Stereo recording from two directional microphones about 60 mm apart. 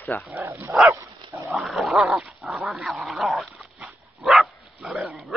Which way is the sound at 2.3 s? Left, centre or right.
Centre.